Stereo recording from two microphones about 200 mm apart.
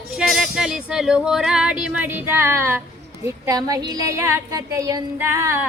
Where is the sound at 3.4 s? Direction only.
15° right (ahead or behind).